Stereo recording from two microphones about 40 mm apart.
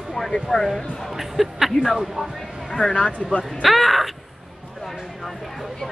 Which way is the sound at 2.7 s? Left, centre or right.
Centre.